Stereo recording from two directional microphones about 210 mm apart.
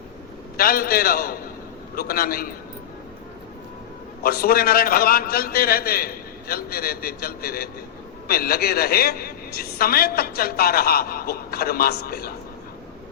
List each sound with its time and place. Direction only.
0.5 s a woman's voice: 45° left (ahead or behind)
4.2 s a woman's voice: 45° left (ahead or behind)